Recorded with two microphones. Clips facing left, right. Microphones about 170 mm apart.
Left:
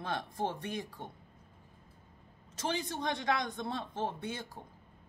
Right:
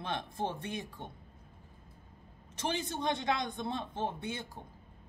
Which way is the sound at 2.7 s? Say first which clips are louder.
Right 1 dB; 25° right (ahead or behind).